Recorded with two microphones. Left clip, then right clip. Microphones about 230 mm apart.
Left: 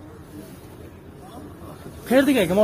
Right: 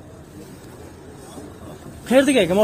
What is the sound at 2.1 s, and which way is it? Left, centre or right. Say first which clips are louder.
Speech: right 3 dB; centre.